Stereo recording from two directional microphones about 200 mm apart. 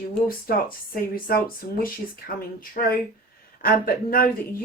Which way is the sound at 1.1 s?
45° left (ahead or behind).